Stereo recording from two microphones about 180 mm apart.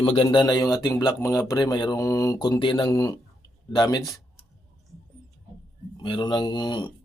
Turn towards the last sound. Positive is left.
turn(degrees=25)  # may be behind; listen again after turning